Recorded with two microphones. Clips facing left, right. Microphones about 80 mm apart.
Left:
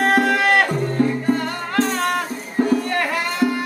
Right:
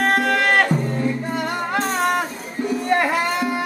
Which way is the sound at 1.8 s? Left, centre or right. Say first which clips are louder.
Left 2 dB; centre.